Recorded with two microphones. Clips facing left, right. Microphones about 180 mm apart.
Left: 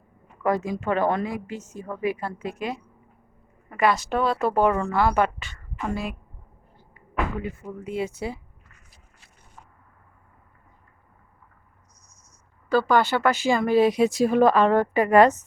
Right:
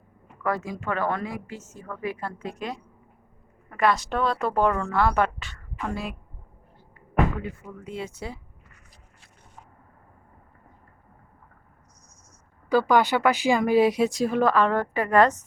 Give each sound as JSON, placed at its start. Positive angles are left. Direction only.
{"t": 0.4, "sound": "a woman's voice", "side_deg": 20}
{"t": 7.4, "sound": "a woman's voice", "side_deg": 10}
{"t": 12.9, "sound": "speech", "side_deg": -15}
{"t": 14.1, "sound": "a woman's voice", "side_deg": 10}